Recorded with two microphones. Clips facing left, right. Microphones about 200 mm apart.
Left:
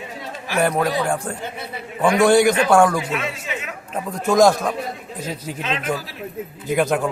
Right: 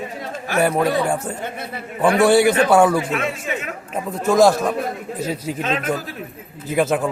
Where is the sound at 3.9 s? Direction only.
5° right (ahead or behind).